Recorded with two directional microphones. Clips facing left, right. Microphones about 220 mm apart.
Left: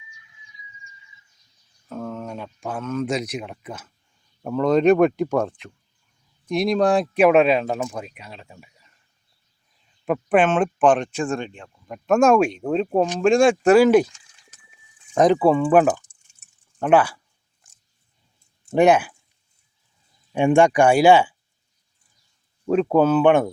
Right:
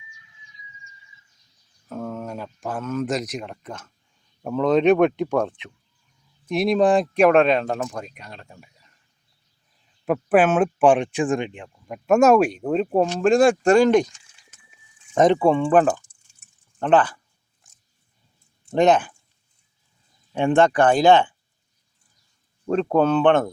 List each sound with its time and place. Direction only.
1.9 s speech: 5° right (ahead or behind)
10.1 s speech: 5° right (ahead or behind)
11.9 s speech: 5° right (ahead or behind)
15.1 s speech: centre (ahead or behind)
16.1 s drip: 25° left (ahead or behind)
16.8 s speech: 10° left (ahead or behind)
17.6 s biting: centre (ahead or behind)
18.7 s speech: 10° left (ahead or behind)
20.3 s speech: 15° left (ahead or behind)
22.6 s speech: 5° left (ahead or behind)